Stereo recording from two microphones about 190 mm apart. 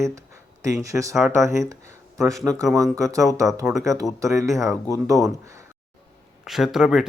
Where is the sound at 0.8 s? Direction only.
15° right (ahead or behind).